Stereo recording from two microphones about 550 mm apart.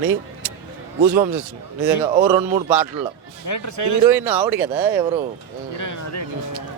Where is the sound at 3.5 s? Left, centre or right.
Left.